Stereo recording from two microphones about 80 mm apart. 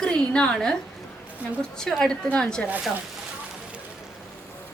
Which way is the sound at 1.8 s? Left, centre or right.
Centre.